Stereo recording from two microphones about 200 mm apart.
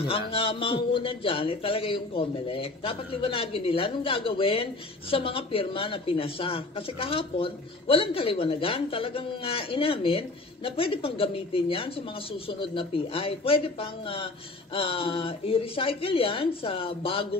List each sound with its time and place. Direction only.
0.0 s speech: 30° left (ahead or behind)